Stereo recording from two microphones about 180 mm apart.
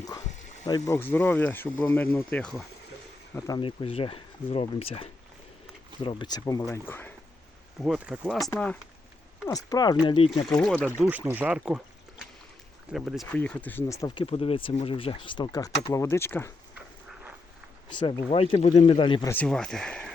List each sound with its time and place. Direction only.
0.7 s speech: 15° left (ahead or behind)
3.3 s speech: 20° left (ahead or behind)
7.9 s speech: 5° right (ahead or behind)
8.5 s speech: 10° left (ahead or behind)
9.5 s speech: 20° left (ahead or behind)
10.4 s speech: 5° left (ahead or behind)
11.1 s speech: 10° right (ahead or behind)
12.9 s speech: centre (ahead or behind); by 14.3 s 20° left (ahead or behind)
14.3 s speech: 30° left (ahead or behind); by 16.5 s 15° left (ahead or behind)
17.8 s speech: 25° left (ahead or behind)
19.3 s speech: 5° left (ahead or behind)